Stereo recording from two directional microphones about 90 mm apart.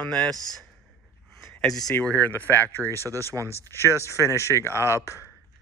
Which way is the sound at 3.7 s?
30° left (ahead or behind).